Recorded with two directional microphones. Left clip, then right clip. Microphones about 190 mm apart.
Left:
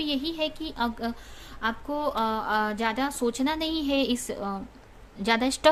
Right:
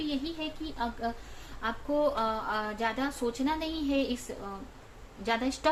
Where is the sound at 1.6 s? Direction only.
40° left (ahead or behind).